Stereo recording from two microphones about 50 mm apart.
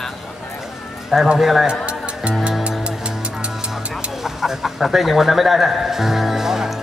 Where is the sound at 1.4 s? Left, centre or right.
Centre.